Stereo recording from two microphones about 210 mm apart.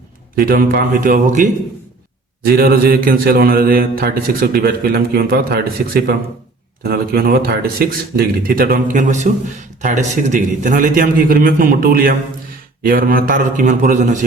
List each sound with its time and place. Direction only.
0.3 s a man's voice: 45° right (ahead or behind)